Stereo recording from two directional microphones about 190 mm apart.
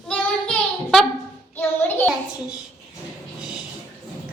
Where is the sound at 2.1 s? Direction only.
5° right (ahead or behind).